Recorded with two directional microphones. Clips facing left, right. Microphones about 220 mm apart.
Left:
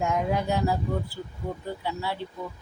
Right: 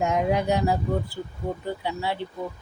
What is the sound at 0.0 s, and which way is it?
Speech, 20° right (ahead or behind).